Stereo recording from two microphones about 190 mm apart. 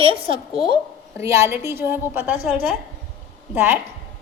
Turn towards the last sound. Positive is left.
turn(degrees=-10)  # may be behind; listen again after turning